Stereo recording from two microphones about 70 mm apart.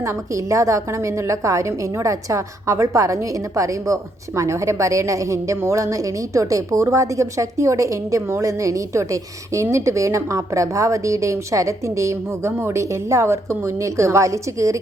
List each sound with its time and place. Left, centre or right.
0.5 s a woman's voice: right